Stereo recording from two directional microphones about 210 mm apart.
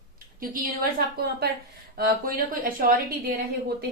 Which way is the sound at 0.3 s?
45° right (ahead or behind).